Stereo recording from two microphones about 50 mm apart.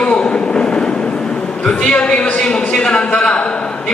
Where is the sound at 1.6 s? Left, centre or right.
Left.